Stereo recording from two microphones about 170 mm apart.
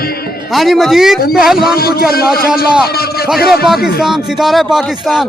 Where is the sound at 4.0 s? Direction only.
Centre (ahead or behind).